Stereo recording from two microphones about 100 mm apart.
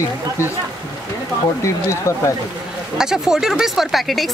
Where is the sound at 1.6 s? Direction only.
30° left (ahead or behind).